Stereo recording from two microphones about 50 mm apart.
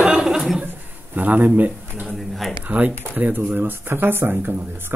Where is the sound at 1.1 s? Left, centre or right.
Right.